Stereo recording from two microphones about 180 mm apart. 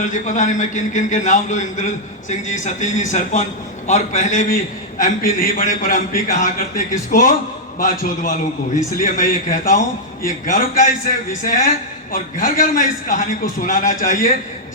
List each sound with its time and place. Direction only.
0.0 s a man's voice: 45° left (ahead or behind)